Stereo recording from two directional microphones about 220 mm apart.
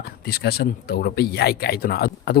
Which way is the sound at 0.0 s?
45° left (ahead or behind).